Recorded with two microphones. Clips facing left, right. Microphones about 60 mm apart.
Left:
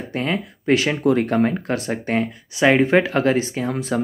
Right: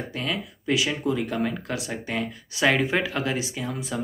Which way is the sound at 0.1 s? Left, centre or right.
Left.